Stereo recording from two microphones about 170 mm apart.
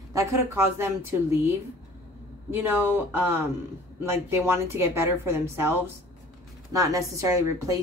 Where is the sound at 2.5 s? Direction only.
10° right (ahead or behind).